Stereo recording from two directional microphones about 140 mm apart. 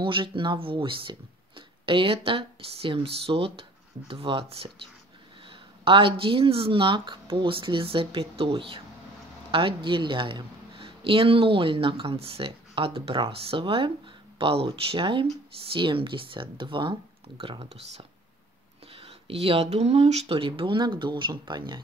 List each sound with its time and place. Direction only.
0.0 s speech: 35° right (ahead or behind)